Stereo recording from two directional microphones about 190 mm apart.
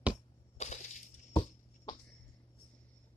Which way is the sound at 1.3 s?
25° left (ahead or behind).